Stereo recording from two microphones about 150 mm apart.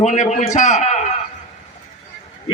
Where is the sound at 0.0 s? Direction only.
50° left (ahead or behind).